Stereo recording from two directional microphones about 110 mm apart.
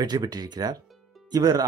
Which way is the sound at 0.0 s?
40° right (ahead or behind).